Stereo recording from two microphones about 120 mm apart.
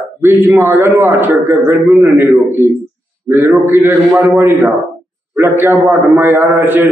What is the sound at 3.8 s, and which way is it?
A man's voice, 15° right (ahead or behind).